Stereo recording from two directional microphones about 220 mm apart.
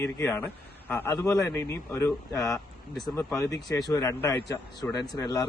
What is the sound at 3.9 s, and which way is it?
A man's voice, 15° left (ahead or behind).